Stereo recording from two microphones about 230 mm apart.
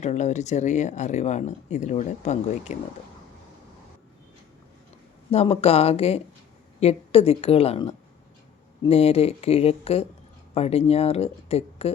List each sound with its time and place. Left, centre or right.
0.0 s speech: left
5.3 s speech: left